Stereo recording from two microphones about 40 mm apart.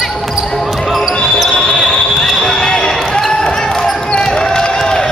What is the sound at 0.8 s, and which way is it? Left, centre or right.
Basketball bounce, centre.